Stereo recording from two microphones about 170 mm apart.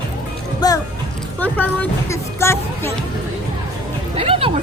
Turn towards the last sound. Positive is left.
turn(degrees=-35)  # may be behind; listen again after turning